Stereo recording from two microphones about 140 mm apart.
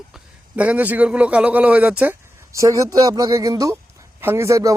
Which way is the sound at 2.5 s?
25° right (ahead or behind).